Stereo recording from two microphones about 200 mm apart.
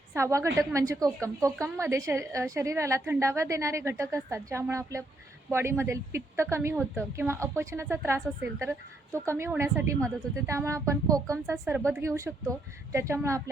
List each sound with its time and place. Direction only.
0.1 s a woman's voice: 15° right (ahead or behind)